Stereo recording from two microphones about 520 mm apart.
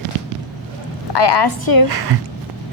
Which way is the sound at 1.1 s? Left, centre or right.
Left.